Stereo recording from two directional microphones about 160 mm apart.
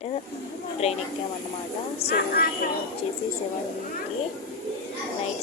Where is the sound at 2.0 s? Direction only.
40° left (ahead or behind).